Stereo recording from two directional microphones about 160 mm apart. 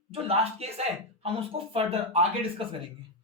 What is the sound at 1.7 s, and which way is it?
Speech, 35° right (ahead or behind).